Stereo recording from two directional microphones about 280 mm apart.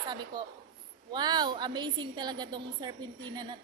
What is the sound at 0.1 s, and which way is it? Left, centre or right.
A woman's voice, centre.